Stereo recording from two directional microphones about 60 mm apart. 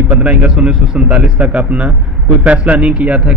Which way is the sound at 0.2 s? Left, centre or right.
Right.